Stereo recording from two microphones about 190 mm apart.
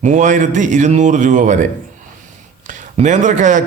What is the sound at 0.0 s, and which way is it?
A man's voice, 40° right (ahead or behind).